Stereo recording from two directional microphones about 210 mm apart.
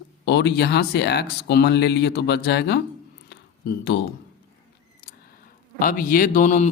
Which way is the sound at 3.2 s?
55° left (ahead or behind).